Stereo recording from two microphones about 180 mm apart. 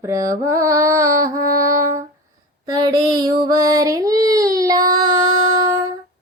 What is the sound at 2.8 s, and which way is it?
Child singing, 20° right (ahead or behind).